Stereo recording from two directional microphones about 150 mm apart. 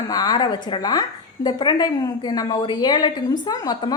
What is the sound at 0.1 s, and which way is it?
A woman's voice, 25° left (ahead or behind).